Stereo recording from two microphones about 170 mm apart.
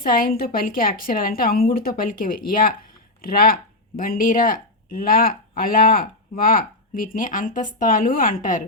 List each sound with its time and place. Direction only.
0.0 s speech: 55° left (ahead or behind)